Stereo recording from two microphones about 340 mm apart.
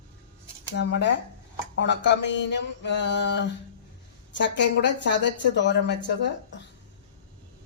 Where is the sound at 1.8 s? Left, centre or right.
Left.